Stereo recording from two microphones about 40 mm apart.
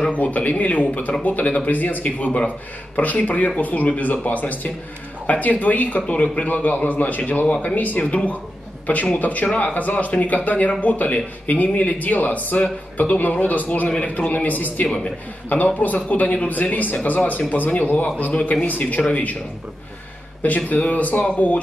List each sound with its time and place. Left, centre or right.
0.1 s a man's voice: left
1.4 s a man's voice: left
1.7 s a man's voice: left
8.0 s a man's voice: left
8.9 s a man's voice: left
20.4 s speech: left